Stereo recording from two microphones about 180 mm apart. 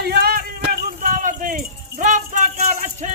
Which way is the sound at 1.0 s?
45° right (ahead or behind).